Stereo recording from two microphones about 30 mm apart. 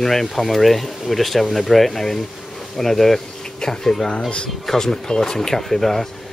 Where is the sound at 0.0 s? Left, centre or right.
Centre.